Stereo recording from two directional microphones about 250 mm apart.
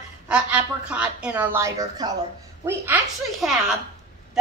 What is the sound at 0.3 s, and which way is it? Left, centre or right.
A woman's voice, centre.